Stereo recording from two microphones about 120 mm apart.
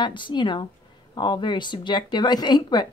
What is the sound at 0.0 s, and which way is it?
Speech, 40° left (ahead or behind).